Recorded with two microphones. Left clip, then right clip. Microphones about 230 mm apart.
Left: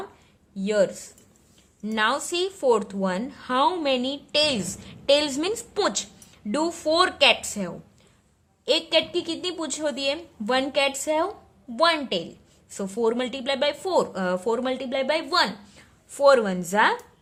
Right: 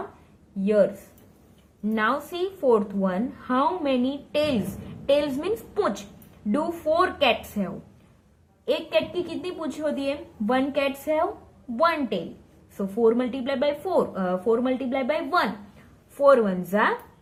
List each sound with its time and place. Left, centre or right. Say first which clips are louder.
0.6 s a woman's voice: right 1 dB; left